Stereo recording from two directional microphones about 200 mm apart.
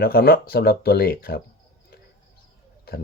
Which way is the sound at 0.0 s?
50° left (ahead or behind).